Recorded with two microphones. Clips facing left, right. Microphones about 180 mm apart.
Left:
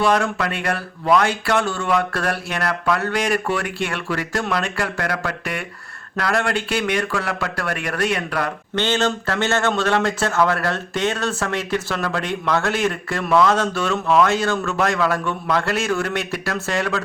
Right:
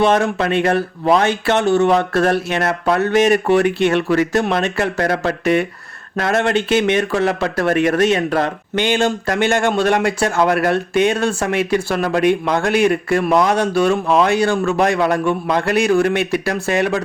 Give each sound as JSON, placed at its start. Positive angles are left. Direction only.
{"t": 0.0, "sound": "speech", "side_deg": -20}
{"t": 8.7, "sound": "speech", "side_deg": -15}